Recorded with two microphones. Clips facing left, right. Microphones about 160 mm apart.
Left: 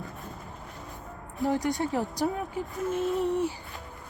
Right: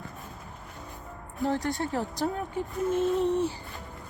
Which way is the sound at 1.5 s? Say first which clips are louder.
Left 2 dB; 15° left (ahead or behind).